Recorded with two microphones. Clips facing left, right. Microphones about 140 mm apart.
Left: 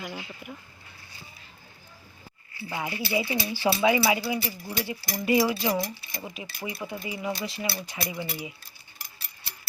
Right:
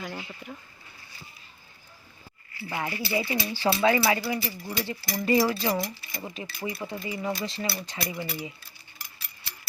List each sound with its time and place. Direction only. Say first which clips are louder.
0.0 s speech: even; 5° left (ahead or behind)
2.6 s speech: even; 15° left (ahead or behind); by 8.2 s centre (ahead or behind)
8.2 s speech: even; 15° left (ahead or behind)